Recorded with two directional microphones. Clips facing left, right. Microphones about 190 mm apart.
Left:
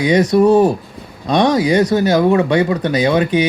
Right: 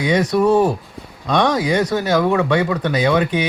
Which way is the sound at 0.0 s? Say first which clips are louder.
Left 4 dB; 15° left (ahead or behind).